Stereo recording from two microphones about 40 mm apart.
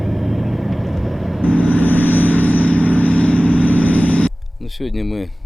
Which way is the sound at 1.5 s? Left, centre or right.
Left.